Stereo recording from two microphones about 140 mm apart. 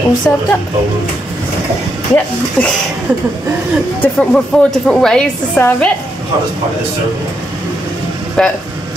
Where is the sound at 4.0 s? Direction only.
5° left (ahead or behind).